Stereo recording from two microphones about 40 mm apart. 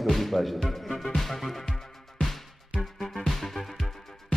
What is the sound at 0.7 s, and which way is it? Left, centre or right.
Music, centre.